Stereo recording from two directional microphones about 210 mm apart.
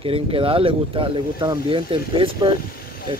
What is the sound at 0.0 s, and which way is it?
Speech, 25° right (ahead or behind).